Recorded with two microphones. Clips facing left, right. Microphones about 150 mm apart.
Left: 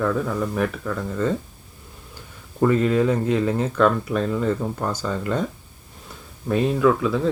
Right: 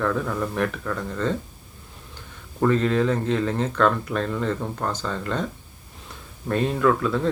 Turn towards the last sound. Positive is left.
turn(degrees=5)  # may be behind; listen again after turning